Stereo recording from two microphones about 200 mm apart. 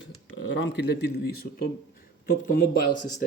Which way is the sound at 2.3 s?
45° left (ahead or behind).